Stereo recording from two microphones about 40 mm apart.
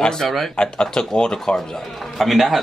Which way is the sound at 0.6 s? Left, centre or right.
Left.